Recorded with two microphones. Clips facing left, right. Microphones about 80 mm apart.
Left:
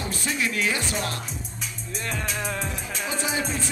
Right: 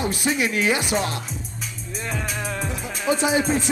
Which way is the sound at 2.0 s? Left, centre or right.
Centre.